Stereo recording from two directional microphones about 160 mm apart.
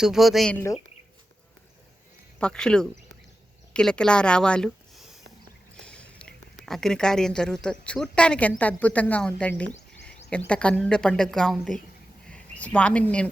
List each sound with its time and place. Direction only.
0.0 s speech: centre (ahead or behind)
0.5 s speech: 15° left (ahead or behind)
2.4 s speech: 5° left (ahead or behind)